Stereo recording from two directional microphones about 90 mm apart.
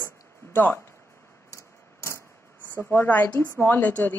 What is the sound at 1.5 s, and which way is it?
Vehicle, 35° left (ahead or behind).